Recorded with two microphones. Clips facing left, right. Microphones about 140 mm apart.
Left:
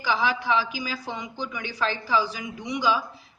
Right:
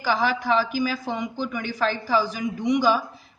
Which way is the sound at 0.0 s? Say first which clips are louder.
Right 2 dB; 45° right (ahead or behind).